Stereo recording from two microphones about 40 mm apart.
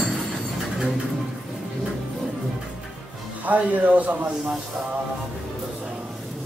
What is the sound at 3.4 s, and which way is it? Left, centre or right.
Speech, right.